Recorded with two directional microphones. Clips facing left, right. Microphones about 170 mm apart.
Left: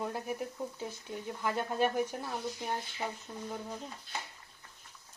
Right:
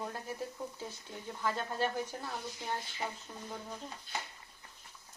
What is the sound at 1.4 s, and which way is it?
Speech, 15° left (ahead or behind).